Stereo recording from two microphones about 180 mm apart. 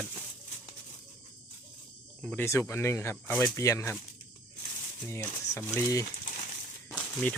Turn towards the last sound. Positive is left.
turn(degrees=5)  # may be behind; listen again after turning